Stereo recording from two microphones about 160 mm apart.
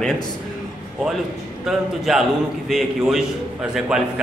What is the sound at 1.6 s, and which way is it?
A man's voice, centre (ahead or behind).